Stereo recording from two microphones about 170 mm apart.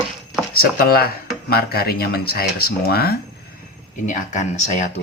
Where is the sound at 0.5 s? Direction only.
60° left (ahead or behind).